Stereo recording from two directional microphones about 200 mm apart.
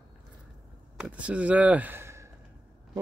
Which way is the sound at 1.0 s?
5° right (ahead or behind).